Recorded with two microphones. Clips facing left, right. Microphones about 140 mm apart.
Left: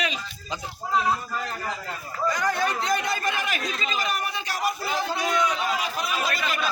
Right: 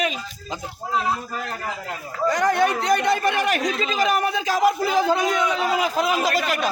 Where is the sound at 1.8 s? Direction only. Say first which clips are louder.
Right 6 dB; 80° right.